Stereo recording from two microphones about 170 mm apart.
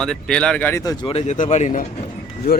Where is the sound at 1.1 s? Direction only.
40° left (ahead or behind).